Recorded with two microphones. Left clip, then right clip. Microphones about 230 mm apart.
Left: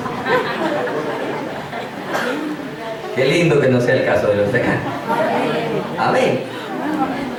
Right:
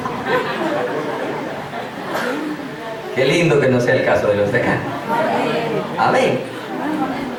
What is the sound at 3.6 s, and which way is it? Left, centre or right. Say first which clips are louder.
A man's voice: even; centre.